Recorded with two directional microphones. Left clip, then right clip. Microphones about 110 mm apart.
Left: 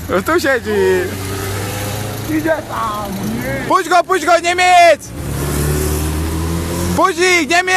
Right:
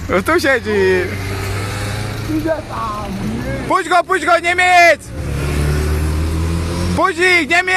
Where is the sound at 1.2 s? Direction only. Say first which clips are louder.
Left 1 dB; 90° left; by 2.0 s 65° left (ahead or behind).